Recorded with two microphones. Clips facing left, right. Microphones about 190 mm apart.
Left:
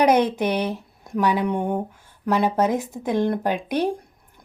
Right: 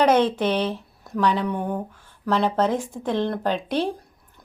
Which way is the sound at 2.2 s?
10° left (ahead or behind).